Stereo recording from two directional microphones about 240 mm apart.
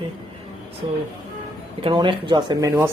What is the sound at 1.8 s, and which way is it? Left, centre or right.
Speech, centre.